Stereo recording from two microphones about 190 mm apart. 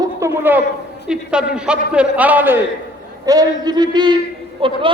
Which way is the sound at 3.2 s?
20° right (ahead or behind).